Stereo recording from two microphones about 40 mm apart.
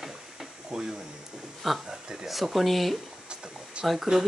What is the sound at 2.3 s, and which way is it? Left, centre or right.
Speech, centre.